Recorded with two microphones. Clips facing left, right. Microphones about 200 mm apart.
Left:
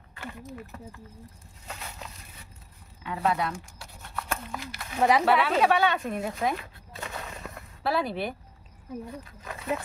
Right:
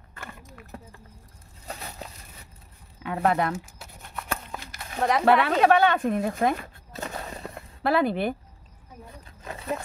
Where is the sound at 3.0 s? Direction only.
55° right (ahead or behind).